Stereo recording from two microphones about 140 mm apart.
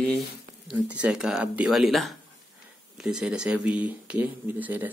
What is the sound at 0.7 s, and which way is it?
Speech, 10° right (ahead or behind).